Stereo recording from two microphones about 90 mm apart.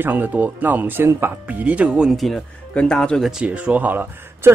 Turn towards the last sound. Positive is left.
turn(degrees=-20)  # may be behind; listen again after turning